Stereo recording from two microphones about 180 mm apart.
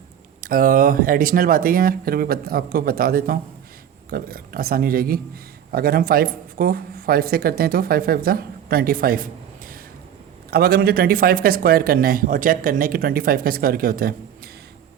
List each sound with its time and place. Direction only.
0.4 s speech: 50° right (ahead or behind)